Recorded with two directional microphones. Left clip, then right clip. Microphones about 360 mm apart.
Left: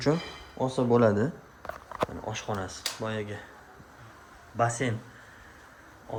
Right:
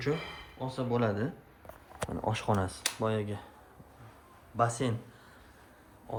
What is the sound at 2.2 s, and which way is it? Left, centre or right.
Speech, centre.